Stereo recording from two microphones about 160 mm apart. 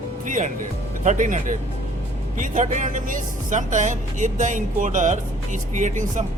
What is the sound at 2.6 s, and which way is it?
Speech, 50° right (ahead or behind).